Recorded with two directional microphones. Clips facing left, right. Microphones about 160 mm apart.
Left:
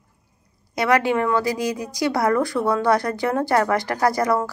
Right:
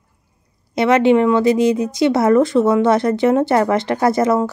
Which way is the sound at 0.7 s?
20° right (ahead or behind).